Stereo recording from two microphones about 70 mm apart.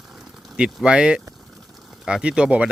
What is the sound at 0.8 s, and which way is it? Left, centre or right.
Speech, centre.